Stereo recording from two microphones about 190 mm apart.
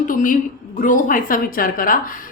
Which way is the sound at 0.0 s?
45° left (ahead or behind).